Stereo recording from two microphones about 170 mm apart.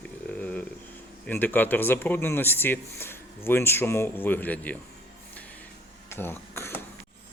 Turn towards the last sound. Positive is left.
turn(degrees=15)  # may be behind; listen again after turning